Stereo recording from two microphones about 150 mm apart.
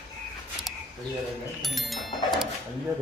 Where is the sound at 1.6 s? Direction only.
Centre (ahead or behind).